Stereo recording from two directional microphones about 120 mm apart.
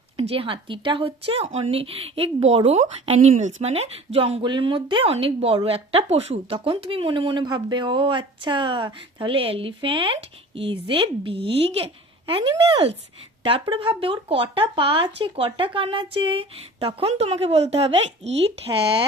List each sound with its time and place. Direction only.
0.2 s a woman's voice: 50° right (ahead or behind)
6.7 s a woman's voice: 50° right (ahead or behind)